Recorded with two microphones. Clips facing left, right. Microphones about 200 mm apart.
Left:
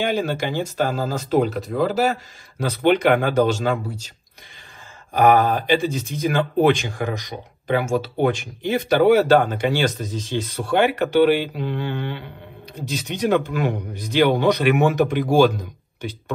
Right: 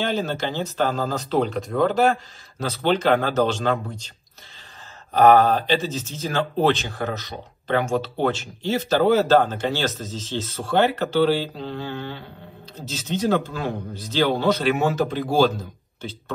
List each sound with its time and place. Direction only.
0.0 s speech: 10° left (ahead or behind)
5.1 s speech: 10° left (ahead or behind)